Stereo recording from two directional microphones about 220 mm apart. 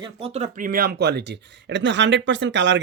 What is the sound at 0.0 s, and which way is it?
Speech, 25° right (ahead or behind).